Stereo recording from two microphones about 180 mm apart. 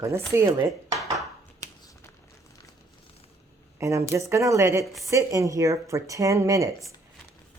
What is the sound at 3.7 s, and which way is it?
Speech, 15° right (ahead or behind).